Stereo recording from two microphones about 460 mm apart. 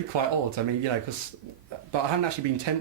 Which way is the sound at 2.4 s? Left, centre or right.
Right.